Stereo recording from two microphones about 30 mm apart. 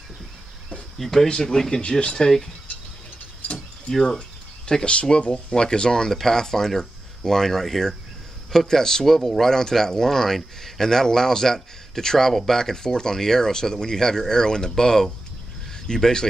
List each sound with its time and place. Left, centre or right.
0.9 s speech: centre
1.8 s speech: left
2.2 s speech: centre
4.7 s speech: left